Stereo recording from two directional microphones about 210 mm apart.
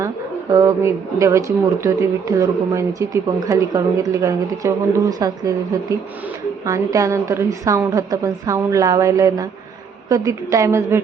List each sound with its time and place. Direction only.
0.5 s speech: 15° right (ahead or behind)